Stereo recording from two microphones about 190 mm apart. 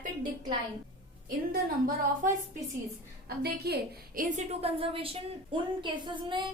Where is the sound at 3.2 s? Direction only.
55° right (ahead or behind).